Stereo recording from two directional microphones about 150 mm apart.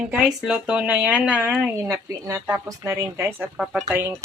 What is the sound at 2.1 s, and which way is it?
A woman's voice, 20° right (ahead or behind).